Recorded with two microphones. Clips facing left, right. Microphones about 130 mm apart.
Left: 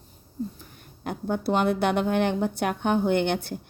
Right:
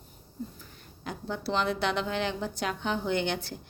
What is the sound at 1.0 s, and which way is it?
A woman's voice, 55° left (ahead or behind).